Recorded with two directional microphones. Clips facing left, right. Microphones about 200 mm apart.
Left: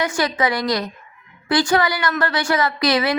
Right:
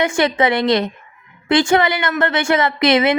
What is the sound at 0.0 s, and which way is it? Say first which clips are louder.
A woman's voice: right 4 dB; 25° right (ahead or behind).